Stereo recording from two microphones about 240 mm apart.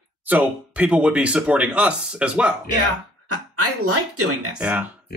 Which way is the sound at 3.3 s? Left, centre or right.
Right.